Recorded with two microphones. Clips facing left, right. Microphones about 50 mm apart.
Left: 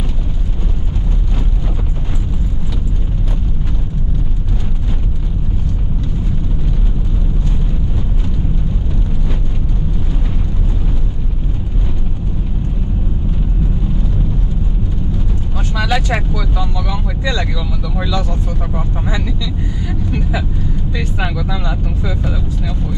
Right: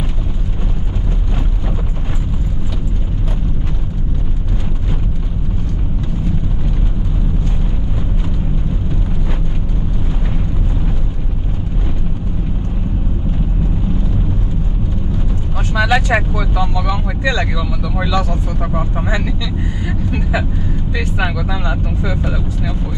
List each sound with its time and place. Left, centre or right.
15.7 s vehicle: right